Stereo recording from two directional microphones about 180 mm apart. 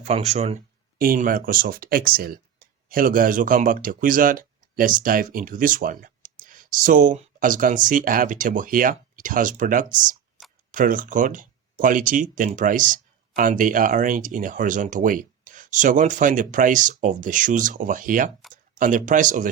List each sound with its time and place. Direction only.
0.0 s speech: 35° right (ahead or behind)
0.9 s speech: 55° right (ahead or behind)